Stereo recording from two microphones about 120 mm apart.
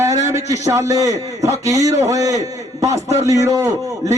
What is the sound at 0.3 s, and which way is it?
A man's voice, 25° right (ahead or behind).